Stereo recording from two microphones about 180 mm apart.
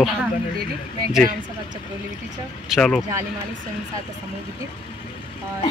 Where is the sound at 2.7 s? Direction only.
Centre (ahead or behind).